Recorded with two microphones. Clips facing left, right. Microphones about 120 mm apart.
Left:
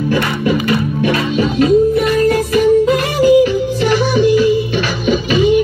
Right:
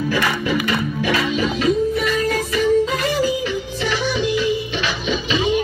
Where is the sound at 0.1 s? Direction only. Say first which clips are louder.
Left 6 dB; 45° left (ahead or behind).